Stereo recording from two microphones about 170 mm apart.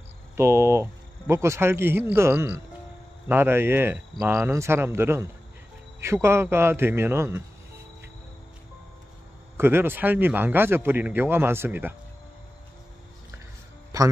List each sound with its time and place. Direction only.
0.4 s a man's voice: 15° right (ahead or behind)
9.6 s a man's voice: 15° right (ahead or behind)
13.9 s speech: 20° right (ahead or behind)